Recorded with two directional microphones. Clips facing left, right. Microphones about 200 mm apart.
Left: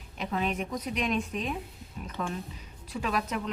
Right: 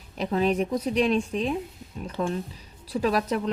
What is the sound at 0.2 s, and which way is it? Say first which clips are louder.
Speech: right 7 dB; 35° right (ahead or behind).